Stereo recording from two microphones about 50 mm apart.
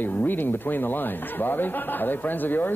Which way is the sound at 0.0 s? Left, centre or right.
Left.